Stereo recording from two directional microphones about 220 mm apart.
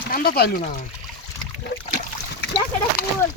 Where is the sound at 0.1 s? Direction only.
45° left (ahead or behind).